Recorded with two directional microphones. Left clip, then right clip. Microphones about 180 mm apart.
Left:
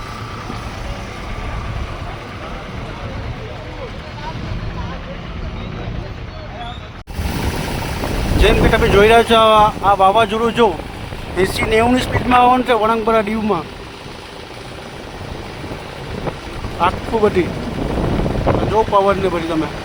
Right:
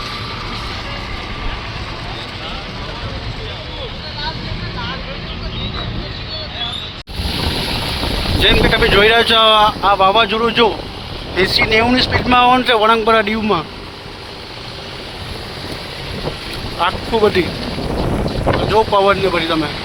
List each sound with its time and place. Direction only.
8.4 s speech: 10° left (ahead or behind)
12.3 s speech: centre (ahead or behind)
16.8 s speech: centre (ahead or behind)
18.1 s boat: centre (ahead or behind)
18.9 s speech: 10° right (ahead or behind)